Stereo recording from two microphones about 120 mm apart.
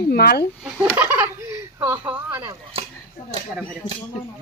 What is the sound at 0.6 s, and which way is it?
Speech, 10° right (ahead or behind).